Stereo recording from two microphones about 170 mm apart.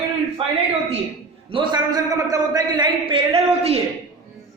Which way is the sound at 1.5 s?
25° right (ahead or behind).